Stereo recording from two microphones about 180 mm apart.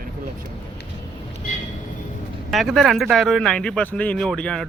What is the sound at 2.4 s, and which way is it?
Speech, centre (ahead or behind).